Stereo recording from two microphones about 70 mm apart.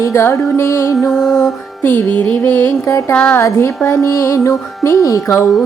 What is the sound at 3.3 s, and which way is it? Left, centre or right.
Music, left.